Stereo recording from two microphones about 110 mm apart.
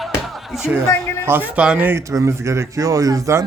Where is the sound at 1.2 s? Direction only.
20° right (ahead or behind).